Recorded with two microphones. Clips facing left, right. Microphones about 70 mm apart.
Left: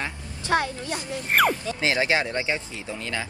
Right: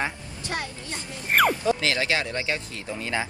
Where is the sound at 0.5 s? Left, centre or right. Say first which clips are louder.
Left 9 dB; left.